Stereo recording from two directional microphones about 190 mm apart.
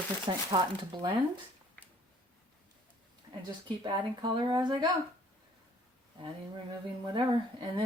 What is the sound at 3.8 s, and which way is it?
Speech, 25° right (ahead or behind).